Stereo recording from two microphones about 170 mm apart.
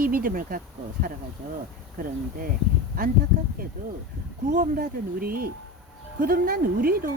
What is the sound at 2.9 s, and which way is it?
Speech, 60° right (ahead or behind).